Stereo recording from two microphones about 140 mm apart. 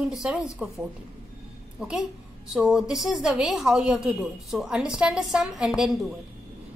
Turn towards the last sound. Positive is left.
turn(degrees=0)  # may be behind; listen again after turning